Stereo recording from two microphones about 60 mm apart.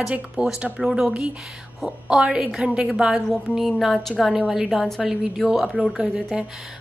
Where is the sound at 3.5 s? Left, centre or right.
Centre.